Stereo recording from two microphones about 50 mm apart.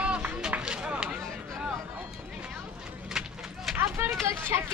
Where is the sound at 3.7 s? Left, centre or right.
Right.